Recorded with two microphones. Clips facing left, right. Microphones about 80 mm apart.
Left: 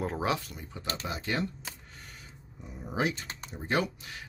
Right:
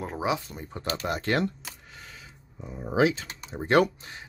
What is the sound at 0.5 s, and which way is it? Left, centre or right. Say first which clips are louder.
Speech: right 5 dB; right.